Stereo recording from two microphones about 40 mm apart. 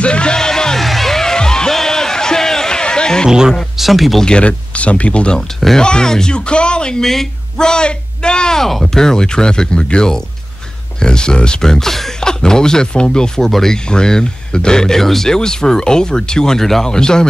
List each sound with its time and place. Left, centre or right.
0.0 s music: left
0.7 s music: centre; by 3.3 s left
3.3 s speech: centre
3.7 s speech: centre
4.2 s speech: left
7.0 s speech: centre
9.0 s speech: centre